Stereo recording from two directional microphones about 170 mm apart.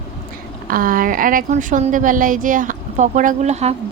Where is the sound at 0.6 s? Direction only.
55° right (ahead or behind).